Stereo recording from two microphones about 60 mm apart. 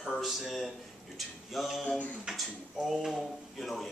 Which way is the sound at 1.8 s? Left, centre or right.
Centre.